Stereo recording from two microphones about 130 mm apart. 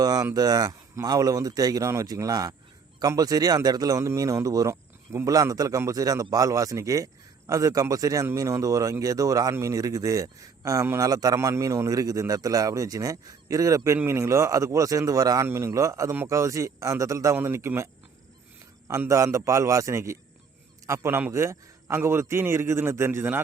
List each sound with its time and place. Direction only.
0.0 s speech: 30° right (ahead or behind)
18.9 s speech: 25° right (ahead or behind)